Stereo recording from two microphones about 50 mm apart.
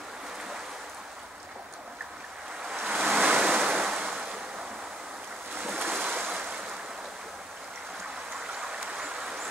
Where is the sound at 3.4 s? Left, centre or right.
Centre.